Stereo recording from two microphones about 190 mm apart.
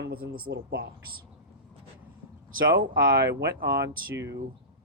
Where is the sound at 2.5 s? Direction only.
50° right (ahead or behind).